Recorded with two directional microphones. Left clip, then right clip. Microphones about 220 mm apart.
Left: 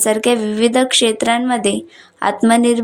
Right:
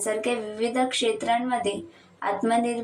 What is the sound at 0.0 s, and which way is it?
Speech, 50° left (ahead or behind).